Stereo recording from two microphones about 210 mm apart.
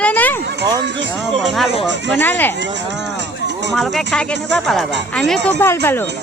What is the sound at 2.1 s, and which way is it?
Speech, 10° left (ahead or behind).